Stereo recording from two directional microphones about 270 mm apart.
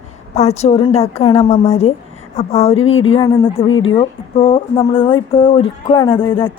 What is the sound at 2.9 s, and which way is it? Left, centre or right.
Speech, left.